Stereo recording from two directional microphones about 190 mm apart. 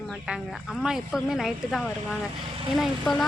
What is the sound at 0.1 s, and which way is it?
A woman's voice, 5° right (ahead or behind).